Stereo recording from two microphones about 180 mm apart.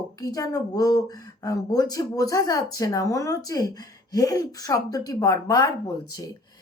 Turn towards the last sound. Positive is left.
turn(degrees=20)  # may be behind; listen again after turning